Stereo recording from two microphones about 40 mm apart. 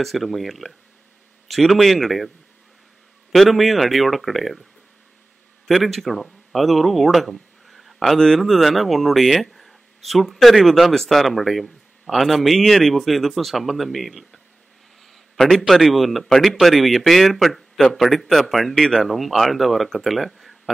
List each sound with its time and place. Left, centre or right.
0.0 s speech: centre
5.7 s speech: centre
15.4 s a man's voice: left
15.7 s speech: centre